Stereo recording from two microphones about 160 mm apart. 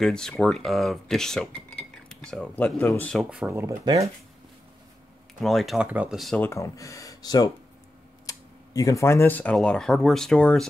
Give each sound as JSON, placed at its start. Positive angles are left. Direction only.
{"t": 0.0, "sound": "speech", "side_deg": 5}
{"t": 3.3, "sound": "speech", "side_deg": -10}
{"t": 5.4, "sound": "speech", "side_deg": 0}
{"t": 6.5, "sound": "speech", "side_deg": 20}